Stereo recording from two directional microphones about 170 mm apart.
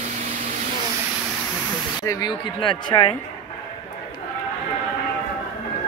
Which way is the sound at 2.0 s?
20° left (ahead or behind).